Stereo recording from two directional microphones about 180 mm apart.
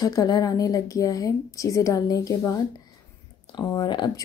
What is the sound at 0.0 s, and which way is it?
Speech, 20° left (ahead or behind).